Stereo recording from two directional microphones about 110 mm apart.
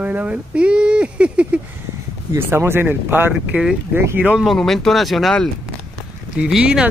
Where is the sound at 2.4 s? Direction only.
20° right (ahead or behind).